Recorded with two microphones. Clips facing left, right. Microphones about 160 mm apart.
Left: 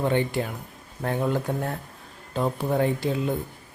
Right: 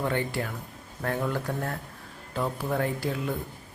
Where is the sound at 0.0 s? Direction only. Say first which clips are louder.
Left 4 dB; 20° left (ahead or behind).